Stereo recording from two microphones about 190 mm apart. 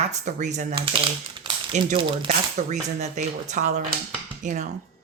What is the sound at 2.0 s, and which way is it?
Speech, 25° right (ahead or behind).